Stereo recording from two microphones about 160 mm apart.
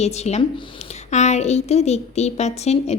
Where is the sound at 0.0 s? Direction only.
45° left (ahead or behind).